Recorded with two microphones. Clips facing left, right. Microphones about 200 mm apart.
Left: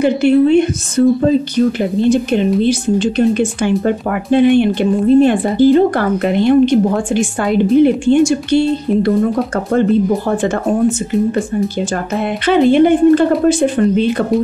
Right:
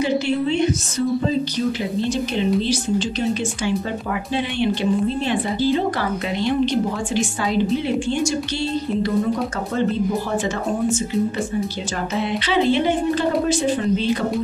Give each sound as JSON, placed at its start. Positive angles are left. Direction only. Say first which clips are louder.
{"t": 0.0, "sound": "speech", "louder": "left 9 dB", "side_deg": 55}
{"t": 12.4, "sound": "speech", "louder": "left 10 dB", "side_deg": 50}